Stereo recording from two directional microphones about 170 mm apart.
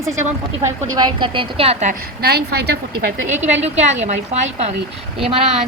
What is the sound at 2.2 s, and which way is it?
Speech, 70° right (ahead or behind).